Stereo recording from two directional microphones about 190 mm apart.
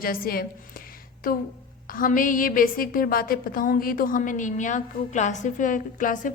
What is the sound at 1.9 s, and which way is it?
A woman's voice, 45° left (ahead or behind).